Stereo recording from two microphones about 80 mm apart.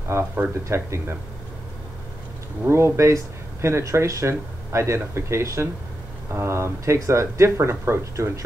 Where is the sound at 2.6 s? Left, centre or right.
Right.